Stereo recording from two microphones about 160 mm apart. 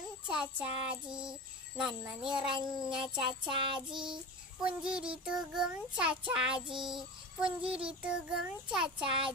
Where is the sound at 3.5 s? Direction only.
30° right (ahead or behind).